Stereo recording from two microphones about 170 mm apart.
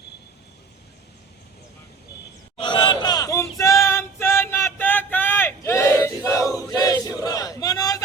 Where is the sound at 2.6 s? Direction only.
30° left (ahead or behind).